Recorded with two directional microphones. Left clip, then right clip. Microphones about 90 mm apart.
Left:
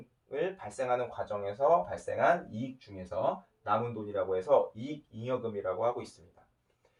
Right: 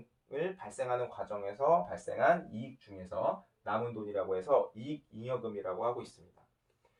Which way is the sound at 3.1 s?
5° right (ahead or behind).